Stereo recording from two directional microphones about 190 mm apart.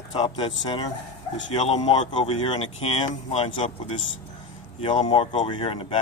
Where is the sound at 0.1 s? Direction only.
30° left (ahead or behind).